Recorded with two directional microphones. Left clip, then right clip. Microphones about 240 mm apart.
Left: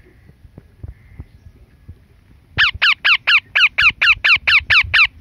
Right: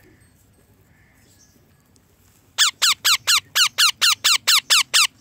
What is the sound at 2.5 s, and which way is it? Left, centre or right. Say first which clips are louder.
Squeak: left 5 dB; centre.